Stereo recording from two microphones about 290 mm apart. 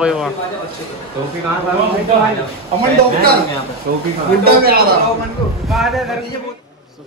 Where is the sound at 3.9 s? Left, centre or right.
Right.